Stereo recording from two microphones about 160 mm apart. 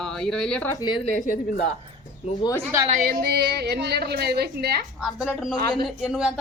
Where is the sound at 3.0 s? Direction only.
80° right.